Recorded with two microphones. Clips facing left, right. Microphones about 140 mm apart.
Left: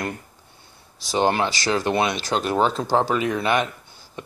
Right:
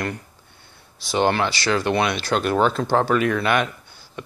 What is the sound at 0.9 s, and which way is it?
Speech, 35° left (ahead or behind).